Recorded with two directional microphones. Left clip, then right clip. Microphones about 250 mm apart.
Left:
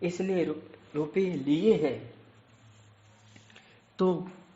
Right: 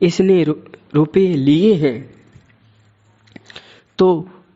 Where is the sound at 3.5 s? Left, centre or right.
Right.